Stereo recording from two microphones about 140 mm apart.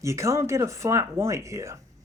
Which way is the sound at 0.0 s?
20° right (ahead or behind).